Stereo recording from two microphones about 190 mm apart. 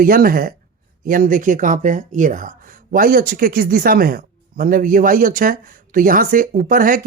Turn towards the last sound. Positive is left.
turn(degrees=-45)  # may be behind; listen again after turning